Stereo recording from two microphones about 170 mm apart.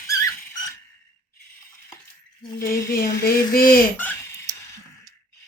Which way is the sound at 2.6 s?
60° left (ahead or behind).